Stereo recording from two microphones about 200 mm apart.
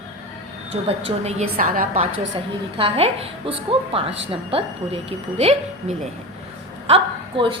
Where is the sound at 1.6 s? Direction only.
45° right (ahead or behind).